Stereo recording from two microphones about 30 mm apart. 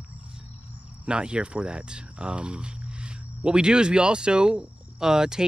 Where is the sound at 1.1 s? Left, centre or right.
Right.